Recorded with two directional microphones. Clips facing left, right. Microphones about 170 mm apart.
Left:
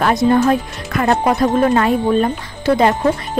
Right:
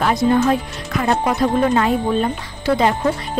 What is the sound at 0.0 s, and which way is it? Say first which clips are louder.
Speech: left 2 dB; 50° left (ahead or behind).